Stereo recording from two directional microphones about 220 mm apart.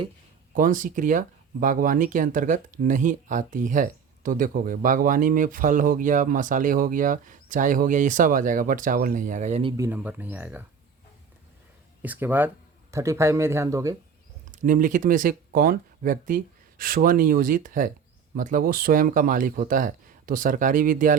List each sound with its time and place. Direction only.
0.5 s speech: 35° right (ahead or behind)
9.7 s speech: 10° right (ahead or behind)
12.0 s speech: 10° right (ahead or behind)
14.5 s speech: 35° right (ahead or behind)